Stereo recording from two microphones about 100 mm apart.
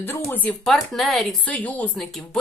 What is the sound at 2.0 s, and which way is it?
Speech, 5° left (ahead or behind).